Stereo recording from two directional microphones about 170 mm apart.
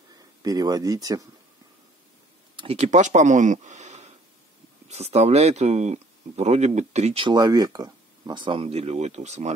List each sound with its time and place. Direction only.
0.4 s speech: 20° right (ahead or behind)
2.5 s speech: 35° right (ahead or behind)